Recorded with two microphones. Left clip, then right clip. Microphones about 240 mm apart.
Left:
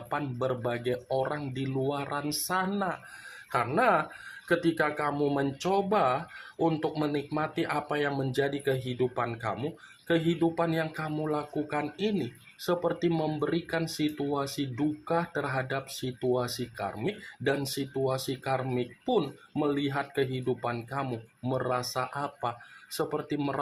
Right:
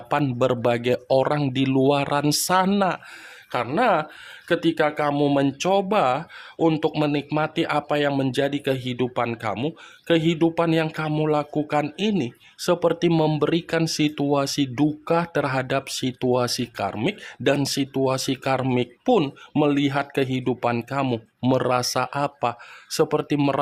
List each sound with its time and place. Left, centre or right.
0.1 s speech: right